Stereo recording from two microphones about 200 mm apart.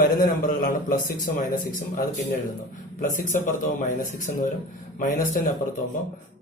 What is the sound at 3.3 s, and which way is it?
A man's voice, 40° left (ahead or behind).